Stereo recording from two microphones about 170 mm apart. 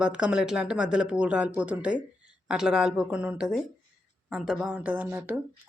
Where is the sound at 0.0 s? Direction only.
5° right (ahead or behind).